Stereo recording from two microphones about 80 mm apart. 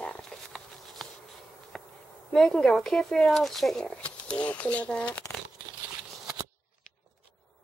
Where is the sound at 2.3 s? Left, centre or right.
Centre.